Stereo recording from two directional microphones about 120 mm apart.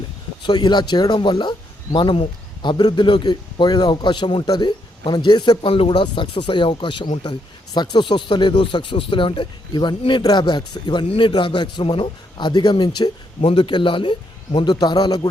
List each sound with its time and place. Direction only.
0.4 s speech: 35° left (ahead or behind)